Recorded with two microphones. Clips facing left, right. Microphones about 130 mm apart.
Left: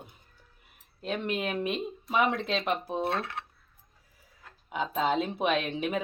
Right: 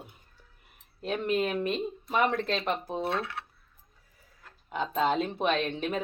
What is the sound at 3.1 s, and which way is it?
Cutlery, 30° left (ahead or behind).